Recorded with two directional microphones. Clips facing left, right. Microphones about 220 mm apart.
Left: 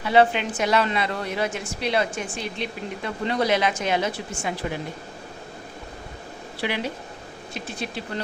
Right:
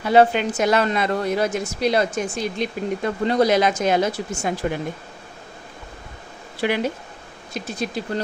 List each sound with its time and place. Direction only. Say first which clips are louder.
0.0 s speech: right 3 dB; 45° right (ahead or behind)
6.6 s speech: right 6 dB; 45° right (ahead or behind)